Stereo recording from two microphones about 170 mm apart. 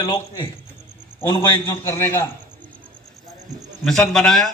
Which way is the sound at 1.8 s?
15° left (ahead or behind).